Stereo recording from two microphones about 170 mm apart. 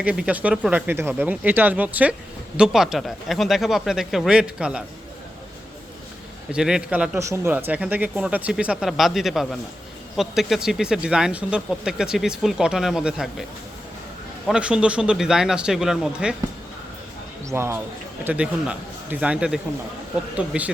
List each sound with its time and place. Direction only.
0.0 s speech: 5° right (ahead or behind)
6.5 s speech: 5° right (ahead or behind)
14.4 s speech: 5° right (ahead or behind)
17.5 s speech: 15° right (ahead or behind)